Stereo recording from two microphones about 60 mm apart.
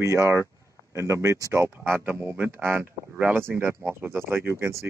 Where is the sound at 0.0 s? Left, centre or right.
Right.